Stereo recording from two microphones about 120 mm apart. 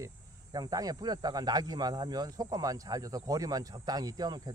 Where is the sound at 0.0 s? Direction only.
30° right (ahead or behind).